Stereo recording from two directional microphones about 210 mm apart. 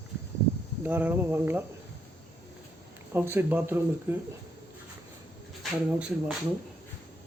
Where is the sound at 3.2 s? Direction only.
10° right (ahead or behind).